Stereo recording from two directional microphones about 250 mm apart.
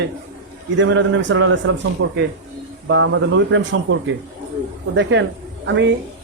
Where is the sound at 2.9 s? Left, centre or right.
Right.